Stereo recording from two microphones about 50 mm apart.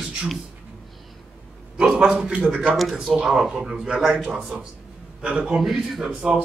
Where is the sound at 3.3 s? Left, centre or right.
Centre.